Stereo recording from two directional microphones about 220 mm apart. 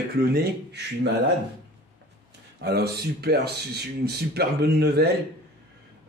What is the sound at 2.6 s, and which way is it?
Speech, 45° right (ahead or behind).